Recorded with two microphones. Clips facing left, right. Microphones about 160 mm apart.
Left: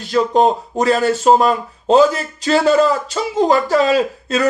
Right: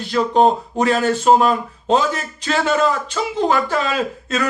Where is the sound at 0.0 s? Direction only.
40° left (ahead or behind).